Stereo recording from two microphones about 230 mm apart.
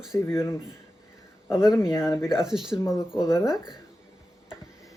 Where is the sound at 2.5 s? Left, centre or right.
Centre.